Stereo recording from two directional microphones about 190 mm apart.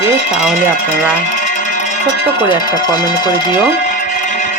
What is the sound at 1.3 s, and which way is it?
Music, 40° left (ahead or behind).